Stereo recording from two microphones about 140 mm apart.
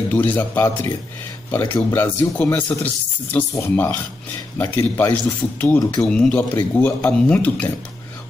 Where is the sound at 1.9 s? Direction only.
10° left (ahead or behind).